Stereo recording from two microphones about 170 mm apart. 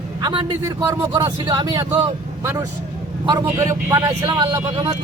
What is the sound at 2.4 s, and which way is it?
A man's voice, 15° right (ahead or behind).